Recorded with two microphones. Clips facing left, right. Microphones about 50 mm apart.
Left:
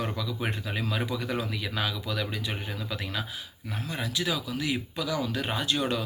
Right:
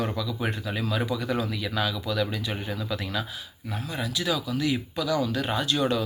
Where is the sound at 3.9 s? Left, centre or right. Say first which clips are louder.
Right 2 dB; left.